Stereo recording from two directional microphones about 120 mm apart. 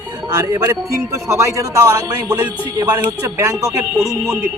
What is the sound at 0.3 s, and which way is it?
A man's voice, 30° right (ahead or behind).